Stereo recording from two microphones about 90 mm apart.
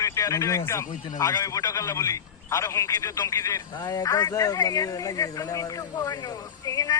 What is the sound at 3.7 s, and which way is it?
A man's voice, 50° left (ahead or behind).